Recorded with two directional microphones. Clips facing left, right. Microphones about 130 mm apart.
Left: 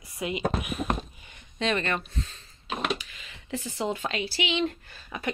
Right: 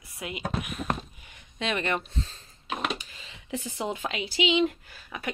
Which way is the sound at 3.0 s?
30° right (ahead or behind).